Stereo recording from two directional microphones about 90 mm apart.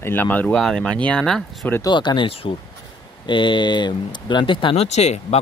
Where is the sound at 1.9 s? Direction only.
55° left (ahead or behind); by 2.5 s 90° left.